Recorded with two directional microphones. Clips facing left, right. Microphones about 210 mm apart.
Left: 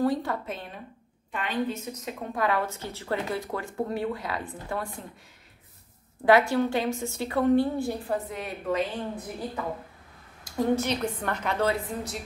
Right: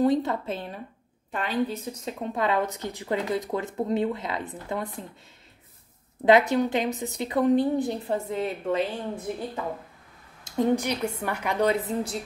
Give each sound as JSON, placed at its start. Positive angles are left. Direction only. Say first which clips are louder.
{"t": 0.0, "sound": "a woman's voice", "louder": "right 4 dB", "side_deg": -20}
{"t": 1.3, "sound": "a woman's voice", "louder": "right 2 dB", "side_deg": -35}
{"t": 6.2, "sound": "a woman's voice", "louder": "right 1 dB", "side_deg": -20}
{"t": 10.4, "sound": "a woman's voice", "louder": "right 2 dB", "side_deg": -15}